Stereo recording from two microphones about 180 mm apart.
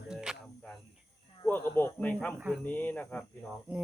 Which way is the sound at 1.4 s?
10° left (ahead or behind).